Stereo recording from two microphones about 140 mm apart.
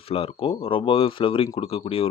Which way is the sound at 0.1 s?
45° left (ahead or behind).